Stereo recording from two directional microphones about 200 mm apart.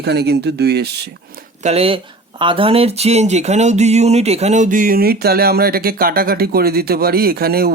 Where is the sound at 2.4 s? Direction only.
25° right (ahead or behind).